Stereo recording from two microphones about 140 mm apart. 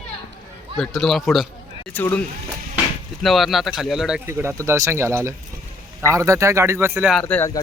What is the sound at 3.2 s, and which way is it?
Speech, centre (ahead or behind).